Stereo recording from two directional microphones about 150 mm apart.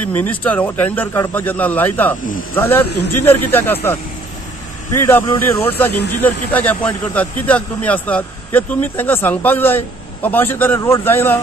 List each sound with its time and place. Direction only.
0.1 s speech: 10° left (ahead or behind)